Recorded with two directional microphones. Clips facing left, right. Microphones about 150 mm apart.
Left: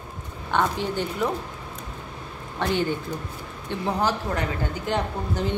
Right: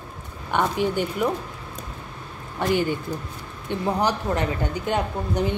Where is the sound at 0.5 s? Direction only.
15° right (ahead or behind).